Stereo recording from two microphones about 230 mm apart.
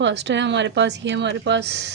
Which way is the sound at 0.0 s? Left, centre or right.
Right.